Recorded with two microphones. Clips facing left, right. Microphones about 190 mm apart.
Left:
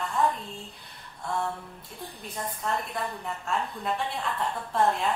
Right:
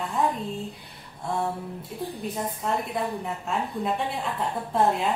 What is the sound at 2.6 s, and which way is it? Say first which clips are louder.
A woman's voice: right 3 dB; 10° right (ahead or behind).